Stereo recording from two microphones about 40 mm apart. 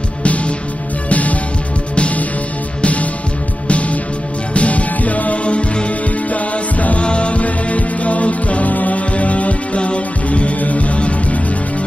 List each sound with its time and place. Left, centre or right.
1.0 s music: left